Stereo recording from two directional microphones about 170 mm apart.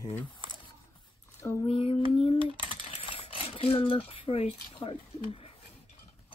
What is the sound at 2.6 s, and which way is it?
Typing, 35° left (ahead or behind).